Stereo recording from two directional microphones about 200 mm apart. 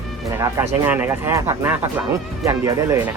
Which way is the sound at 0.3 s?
15° right (ahead or behind).